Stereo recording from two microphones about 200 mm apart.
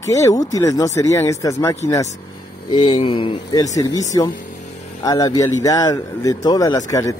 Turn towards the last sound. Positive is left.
turn(degrees=15)  # may be behind; listen again after turning